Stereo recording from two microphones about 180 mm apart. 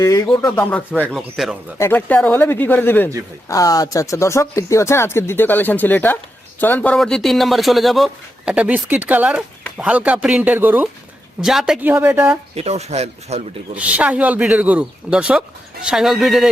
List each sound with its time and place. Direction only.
0.0 s speech: 20° left (ahead or behind); by 12.4 s 10° right (ahead or behind)
12.5 s speech: 35° right (ahead or behind)
13.7 s speech: 5° right (ahead or behind)